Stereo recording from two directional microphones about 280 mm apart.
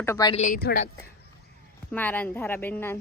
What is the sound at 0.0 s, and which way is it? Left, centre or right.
Speech, centre.